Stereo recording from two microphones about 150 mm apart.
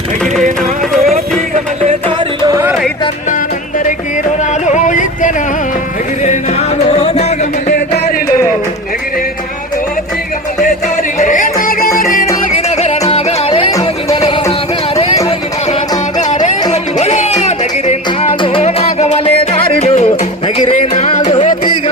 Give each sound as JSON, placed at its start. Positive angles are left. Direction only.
{"t": 2.5, "sound": "a sound", "side_deg": -20}
{"t": 4.6, "sound": "music", "side_deg": 55}
{"t": 7.7, "sound": "music", "side_deg": 90}
{"t": 10.6, "sound": "music", "side_deg": 55}
{"t": 12.5, "sound": "music", "side_deg": 45}
{"t": 16.3, "sound": "music", "side_deg": 50}